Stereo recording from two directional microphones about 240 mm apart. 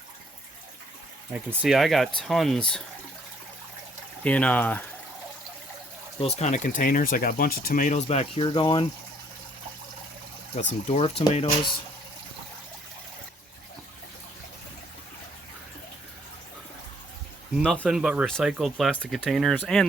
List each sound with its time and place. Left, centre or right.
1.3 s speech: centre
4.2 s speech: centre
6.1 s speech: left
10.8 s speech: left
17.6 s speech: centre